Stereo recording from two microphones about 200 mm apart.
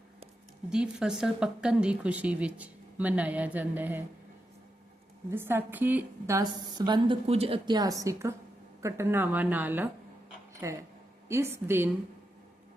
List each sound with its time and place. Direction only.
0.7 s speech: 5° right (ahead or behind)
5.3 s speech: 10° right (ahead or behind)